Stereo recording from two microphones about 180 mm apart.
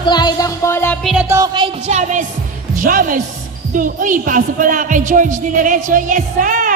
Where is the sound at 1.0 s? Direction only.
Centre (ahead or behind).